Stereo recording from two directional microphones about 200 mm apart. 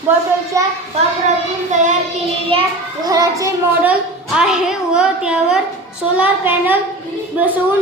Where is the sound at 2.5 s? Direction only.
30° right (ahead or behind).